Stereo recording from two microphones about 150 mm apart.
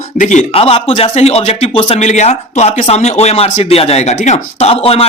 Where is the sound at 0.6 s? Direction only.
40° left (ahead or behind).